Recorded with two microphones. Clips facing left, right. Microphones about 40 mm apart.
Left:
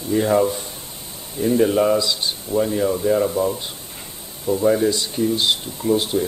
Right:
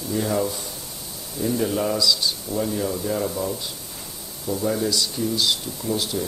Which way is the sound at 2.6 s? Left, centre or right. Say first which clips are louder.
Left 6 dB; left.